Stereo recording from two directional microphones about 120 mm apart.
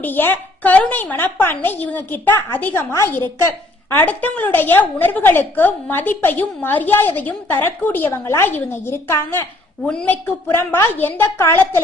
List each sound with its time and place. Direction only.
0.0 s a woman's voice: 15° left (ahead or behind)
9.8 s a woman's voice: 10° left (ahead or behind)